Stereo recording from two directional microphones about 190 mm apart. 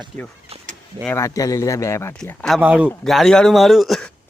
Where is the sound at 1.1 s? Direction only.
15° left (ahead or behind).